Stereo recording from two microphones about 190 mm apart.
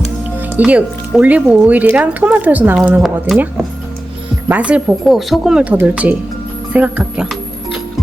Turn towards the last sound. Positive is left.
turn(degrees=-5)  # may be behind; listen again after turning